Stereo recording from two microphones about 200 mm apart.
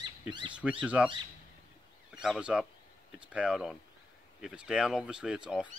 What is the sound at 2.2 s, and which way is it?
Speech, 5° right (ahead or behind).